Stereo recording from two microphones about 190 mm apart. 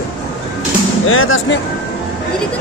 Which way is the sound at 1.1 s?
90° left.